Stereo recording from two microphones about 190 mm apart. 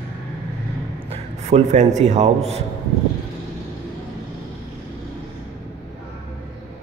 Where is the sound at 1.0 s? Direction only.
35° right (ahead or behind).